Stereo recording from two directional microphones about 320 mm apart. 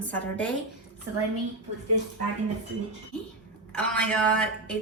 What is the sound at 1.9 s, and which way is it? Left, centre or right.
Speech, right.